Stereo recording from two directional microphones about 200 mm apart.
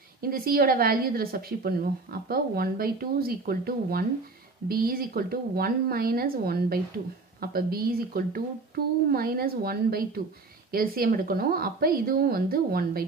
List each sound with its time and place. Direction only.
0.2 s speech: 50° right (ahead or behind)